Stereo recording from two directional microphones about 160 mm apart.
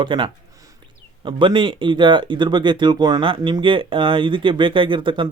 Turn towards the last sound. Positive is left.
turn(degrees=-30)  # may be behind; listen again after turning